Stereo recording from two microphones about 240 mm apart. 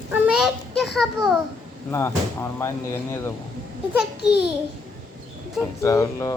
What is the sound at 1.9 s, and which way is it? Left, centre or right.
Speech, centre.